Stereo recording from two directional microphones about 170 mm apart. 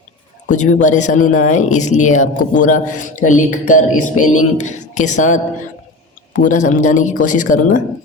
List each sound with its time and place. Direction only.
0.5 s speech: 45° left (ahead or behind)